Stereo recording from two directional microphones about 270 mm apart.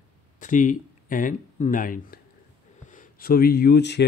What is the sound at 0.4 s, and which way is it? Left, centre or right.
Speech, left.